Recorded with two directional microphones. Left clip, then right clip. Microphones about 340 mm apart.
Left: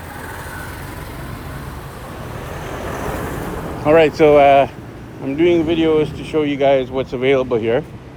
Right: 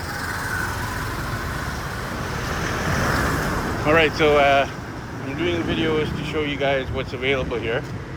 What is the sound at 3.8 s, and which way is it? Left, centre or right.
Speech, centre.